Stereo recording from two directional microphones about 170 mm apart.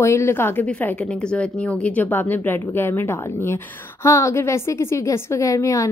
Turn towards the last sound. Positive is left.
turn(degrees=20)  # may be behind; listen again after turning